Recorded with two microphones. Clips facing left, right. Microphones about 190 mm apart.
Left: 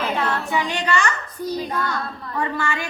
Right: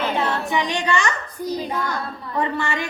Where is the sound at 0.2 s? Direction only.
20° right (ahead or behind).